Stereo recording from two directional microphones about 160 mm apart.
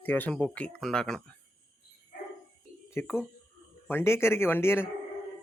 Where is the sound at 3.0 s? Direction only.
15° left (ahead or behind).